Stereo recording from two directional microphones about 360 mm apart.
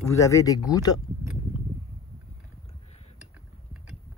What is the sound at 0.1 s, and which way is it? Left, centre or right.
Speech, centre.